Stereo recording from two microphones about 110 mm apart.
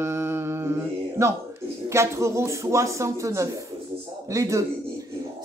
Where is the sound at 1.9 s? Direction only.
25° right (ahead or behind).